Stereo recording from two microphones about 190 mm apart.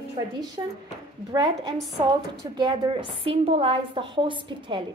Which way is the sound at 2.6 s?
25° right (ahead or behind).